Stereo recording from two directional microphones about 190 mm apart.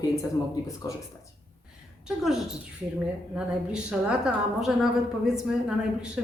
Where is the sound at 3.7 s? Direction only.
5° right (ahead or behind).